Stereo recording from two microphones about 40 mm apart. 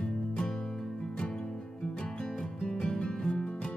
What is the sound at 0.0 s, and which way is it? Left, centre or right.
Music, left.